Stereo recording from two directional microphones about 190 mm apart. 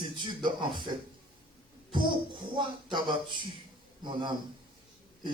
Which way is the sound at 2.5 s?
25° right (ahead or behind).